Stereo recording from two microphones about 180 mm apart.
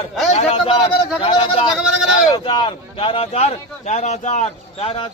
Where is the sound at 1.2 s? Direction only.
30° left (ahead or behind).